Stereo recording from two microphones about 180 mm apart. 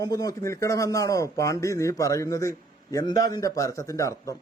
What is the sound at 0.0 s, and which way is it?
Speech, 20° left (ahead or behind).